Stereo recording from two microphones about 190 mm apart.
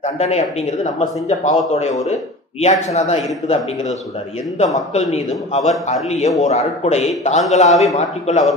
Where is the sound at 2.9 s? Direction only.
35° left (ahead or behind).